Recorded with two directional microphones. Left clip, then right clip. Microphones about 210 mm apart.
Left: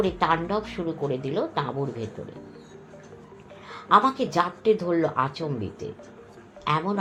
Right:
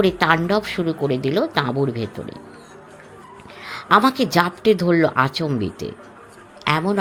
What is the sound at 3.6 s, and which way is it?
A woman's voice, 55° right (ahead or behind).